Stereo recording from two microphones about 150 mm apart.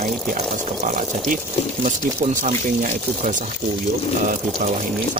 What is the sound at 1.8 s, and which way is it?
Speech, 55° right (ahead or behind).